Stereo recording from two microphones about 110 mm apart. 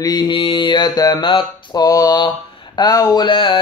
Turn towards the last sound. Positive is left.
turn(degrees=50)  # may be behind; listen again after turning